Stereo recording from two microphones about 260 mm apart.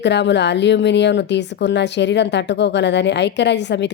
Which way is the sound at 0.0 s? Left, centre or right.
Left.